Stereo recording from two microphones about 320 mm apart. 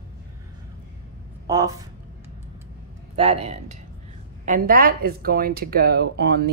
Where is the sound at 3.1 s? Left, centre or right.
Centre.